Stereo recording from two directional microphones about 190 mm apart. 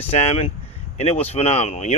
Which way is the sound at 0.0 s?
30° left (ahead or behind).